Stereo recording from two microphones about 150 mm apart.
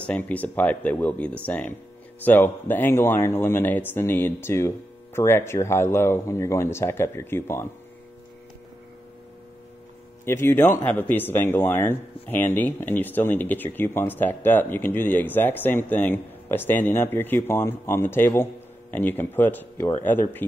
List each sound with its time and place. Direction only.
0.0 s speech: 10° left (ahead or behind)
10.2 s speech: 15° left (ahead or behind)